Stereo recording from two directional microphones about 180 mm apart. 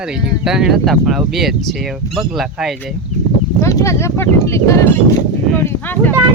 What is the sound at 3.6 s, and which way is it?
Speech, 15° left (ahead or behind).